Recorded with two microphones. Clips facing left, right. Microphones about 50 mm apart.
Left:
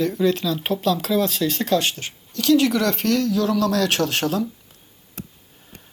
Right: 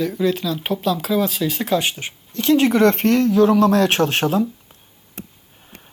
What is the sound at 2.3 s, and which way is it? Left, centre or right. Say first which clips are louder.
Speech: right 2 dB; right.